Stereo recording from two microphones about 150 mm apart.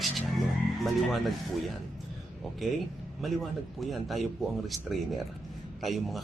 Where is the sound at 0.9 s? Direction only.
Centre (ahead or behind).